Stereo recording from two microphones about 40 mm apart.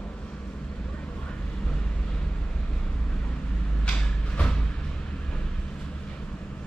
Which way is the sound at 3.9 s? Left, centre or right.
Left.